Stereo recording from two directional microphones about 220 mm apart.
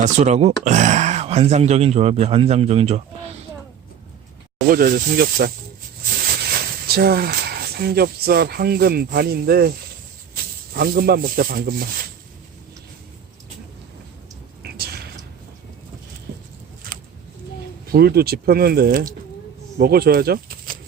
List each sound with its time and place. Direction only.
0.0 s speech: 30° right (ahead or behind)
4.6 s speech: 40° right (ahead or behind)
10.8 s speech: 45° right (ahead or behind)
14.6 s a sound: 45° right (ahead or behind)
17.8 s speech: 45° right (ahead or behind)